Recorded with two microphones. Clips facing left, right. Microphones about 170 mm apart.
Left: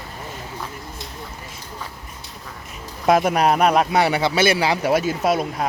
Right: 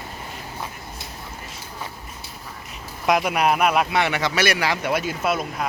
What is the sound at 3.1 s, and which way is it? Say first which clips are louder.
A man's voice: left 3 dB; 40° left (ahead or behind).